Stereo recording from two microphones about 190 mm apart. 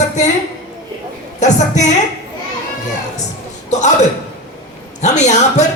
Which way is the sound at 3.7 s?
40° left (ahead or behind).